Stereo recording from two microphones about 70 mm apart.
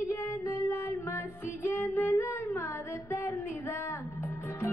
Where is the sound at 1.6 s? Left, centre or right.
Left.